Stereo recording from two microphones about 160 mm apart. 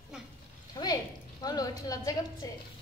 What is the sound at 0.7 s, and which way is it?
A woman's voice, 25° left (ahead or behind).